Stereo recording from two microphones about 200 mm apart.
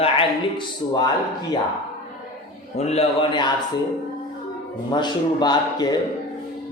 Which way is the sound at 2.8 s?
30° left (ahead or behind).